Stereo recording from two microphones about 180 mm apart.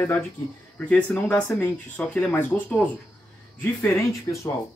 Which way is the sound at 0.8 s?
5° left (ahead or behind).